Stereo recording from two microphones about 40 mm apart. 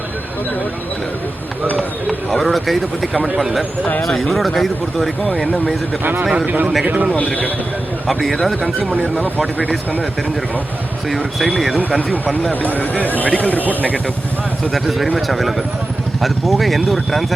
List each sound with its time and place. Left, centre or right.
1.7 s a sound: centre
4.0 s speech: centre
6.3 s a man's voice: right
8.0 s speech: centre
11.1 s speech: centre
12.1 s speech: left
14.7 s speech: centre